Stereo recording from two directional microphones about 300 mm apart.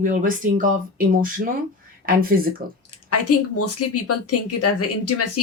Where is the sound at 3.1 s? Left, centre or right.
Left.